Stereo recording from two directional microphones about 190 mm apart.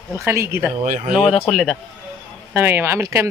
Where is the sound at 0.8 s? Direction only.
45° right (ahead or behind).